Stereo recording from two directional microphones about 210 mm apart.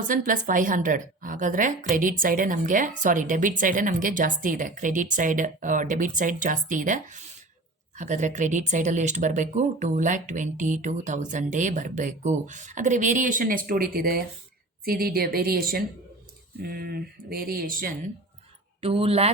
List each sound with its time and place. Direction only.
0.1 s speech: 40° right (ahead or behind)
18.8 s speech: 25° right (ahead or behind)